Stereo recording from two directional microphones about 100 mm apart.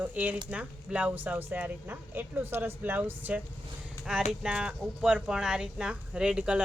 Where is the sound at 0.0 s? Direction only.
15° right (ahead or behind).